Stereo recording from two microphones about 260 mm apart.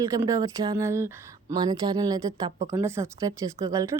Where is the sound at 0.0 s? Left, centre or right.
Centre.